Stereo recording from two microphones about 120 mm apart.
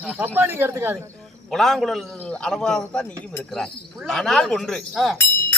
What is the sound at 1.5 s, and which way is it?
A man's voice, centre (ahead or behind).